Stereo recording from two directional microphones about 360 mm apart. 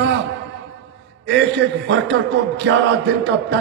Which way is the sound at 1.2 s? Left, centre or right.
Right.